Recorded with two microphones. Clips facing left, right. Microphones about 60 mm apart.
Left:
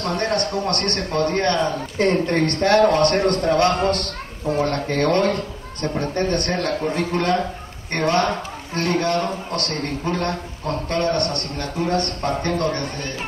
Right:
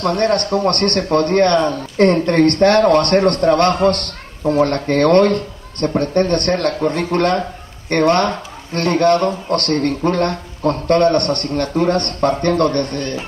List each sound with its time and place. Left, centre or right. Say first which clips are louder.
0.0 s a man's voice: right 6 dB; right